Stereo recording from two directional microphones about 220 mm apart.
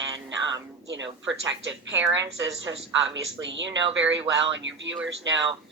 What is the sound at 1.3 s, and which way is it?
Speech, 55° right (ahead or behind).